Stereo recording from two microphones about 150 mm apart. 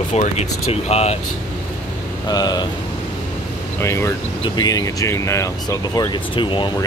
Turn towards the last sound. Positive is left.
turn(degrees=30)  # may be behind; listen again after turning